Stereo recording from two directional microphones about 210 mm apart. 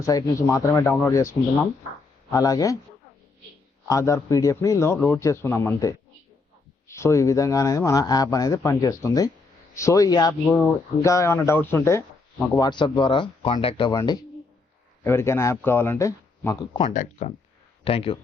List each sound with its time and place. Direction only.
0.0 s speech: 15° left (ahead or behind)
3.8 s speech: 15° left (ahead or behind)
16.9 s speech: 35° left (ahead or behind)